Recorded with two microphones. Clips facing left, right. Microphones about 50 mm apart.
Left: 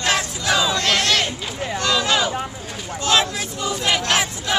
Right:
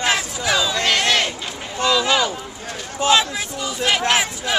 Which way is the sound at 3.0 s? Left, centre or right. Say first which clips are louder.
Right 4 dB; right.